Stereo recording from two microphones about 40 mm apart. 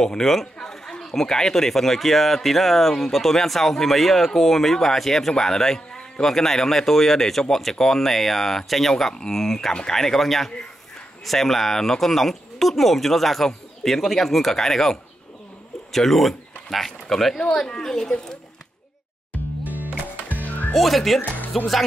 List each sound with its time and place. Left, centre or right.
0.0 s speech: centre
17.6 s speech: centre
19.6 s music: right
20.4 s music: left
20.7 s speech: centre
21.2 s speech: left